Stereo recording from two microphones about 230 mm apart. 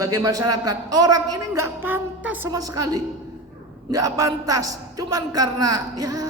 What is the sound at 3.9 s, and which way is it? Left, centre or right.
A man's voice, centre.